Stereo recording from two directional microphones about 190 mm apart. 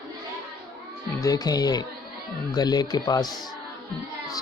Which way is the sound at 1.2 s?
20° left (ahead or behind).